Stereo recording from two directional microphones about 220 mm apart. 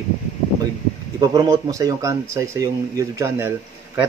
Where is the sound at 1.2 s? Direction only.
15° right (ahead or behind).